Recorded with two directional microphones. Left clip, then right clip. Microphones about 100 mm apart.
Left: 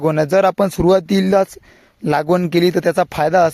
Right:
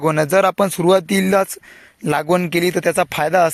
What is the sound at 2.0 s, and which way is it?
Speech, 65° left (ahead or behind).